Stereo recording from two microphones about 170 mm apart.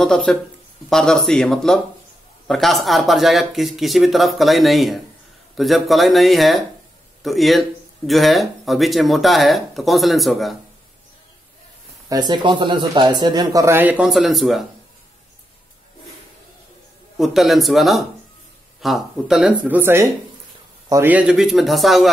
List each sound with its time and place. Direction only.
0.0 s speech: 5° left (ahead or behind)
12.1 s speech: 25° right (ahead or behind); by 14.6 s centre (ahead or behind)
17.2 s speech: centre (ahead or behind)